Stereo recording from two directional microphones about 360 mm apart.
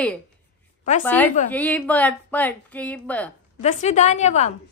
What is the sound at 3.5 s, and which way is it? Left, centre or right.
Speech, centre.